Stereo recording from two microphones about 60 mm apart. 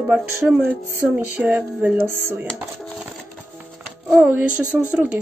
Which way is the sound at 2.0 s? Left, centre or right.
Right.